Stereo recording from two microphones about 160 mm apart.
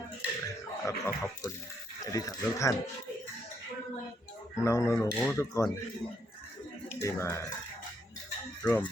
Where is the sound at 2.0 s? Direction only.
20° left (ahead or behind).